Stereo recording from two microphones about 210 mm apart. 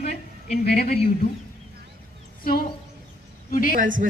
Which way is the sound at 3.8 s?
40° right (ahead or behind).